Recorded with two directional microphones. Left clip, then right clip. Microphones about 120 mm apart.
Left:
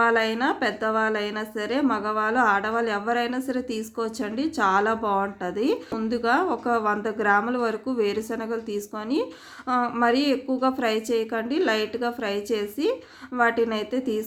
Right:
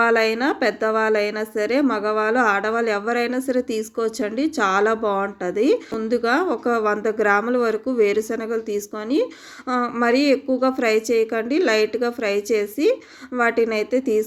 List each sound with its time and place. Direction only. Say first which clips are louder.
0.0 s a woman's voice: right 3 dB; 25° right (ahead or behind)